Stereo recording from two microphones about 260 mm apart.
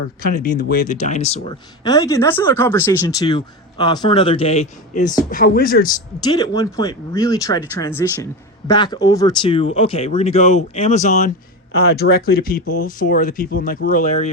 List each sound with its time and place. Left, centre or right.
0.2 s speech: left
6.2 s speech: centre